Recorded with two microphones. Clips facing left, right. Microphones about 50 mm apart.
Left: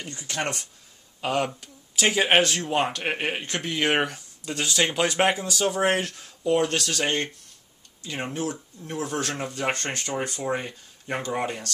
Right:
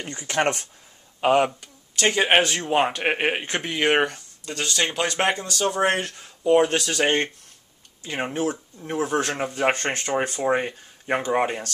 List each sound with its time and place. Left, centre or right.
0.0 s speech: right
1.6 s a sound: centre
2.2 s speech: centre
3.0 s speech: right
8.0 s speech: right